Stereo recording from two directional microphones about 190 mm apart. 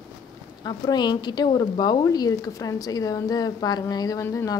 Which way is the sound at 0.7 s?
20° left (ahead or behind).